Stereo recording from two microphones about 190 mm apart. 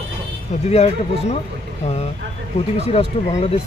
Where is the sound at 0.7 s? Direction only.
35° left (ahead or behind).